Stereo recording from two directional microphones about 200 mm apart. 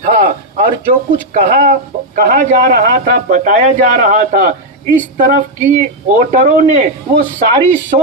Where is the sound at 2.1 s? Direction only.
40° right (ahead or behind).